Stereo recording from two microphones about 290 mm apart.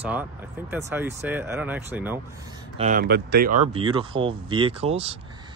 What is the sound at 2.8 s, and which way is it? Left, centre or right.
Speech, right.